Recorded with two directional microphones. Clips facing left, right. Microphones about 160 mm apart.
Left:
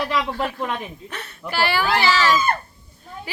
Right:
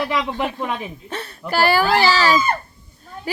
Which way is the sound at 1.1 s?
35° right (ahead or behind).